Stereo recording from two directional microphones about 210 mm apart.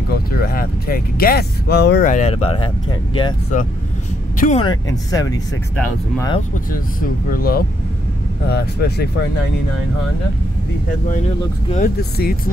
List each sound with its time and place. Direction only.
0.1 s speech: 45° left (ahead or behind)
2.0 s speech: 35° left (ahead or behind)
4.4 s speech: 35° left (ahead or behind)
4.6 s speech: 15° left (ahead or behind)
6.7 s speech: 45° left (ahead or behind)
11.8 s speech: 45° left (ahead or behind)